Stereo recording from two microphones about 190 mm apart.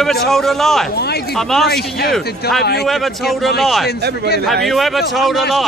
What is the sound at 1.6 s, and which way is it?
Speech, 55° left (ahead or behind).